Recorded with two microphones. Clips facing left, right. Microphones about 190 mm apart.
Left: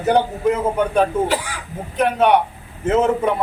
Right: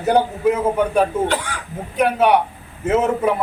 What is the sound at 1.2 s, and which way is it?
Speech, 5° left (ahead or behind).